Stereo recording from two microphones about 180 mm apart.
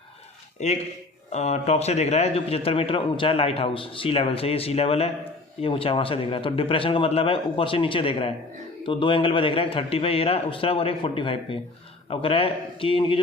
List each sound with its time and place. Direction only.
0.6 s a man's voice: 40° left (ahead or behind)